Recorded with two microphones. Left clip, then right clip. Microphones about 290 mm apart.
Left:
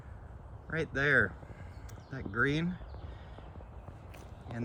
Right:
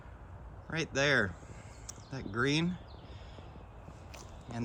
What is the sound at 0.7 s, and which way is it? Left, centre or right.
Speech, centre.